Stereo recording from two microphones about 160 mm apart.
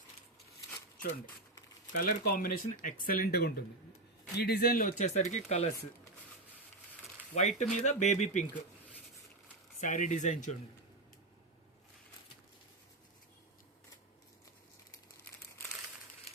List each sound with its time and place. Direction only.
1.9 s speech: 65° left (ahead or behind); by 5.7 s 45° left (ahead or behind)
7.3 s speech: 45° left (ahead or behind)
9.8 s speech: 55° left (ahead or behind)